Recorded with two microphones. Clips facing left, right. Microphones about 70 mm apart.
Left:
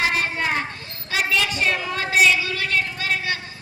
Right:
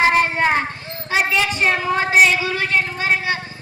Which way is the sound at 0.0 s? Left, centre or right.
Right.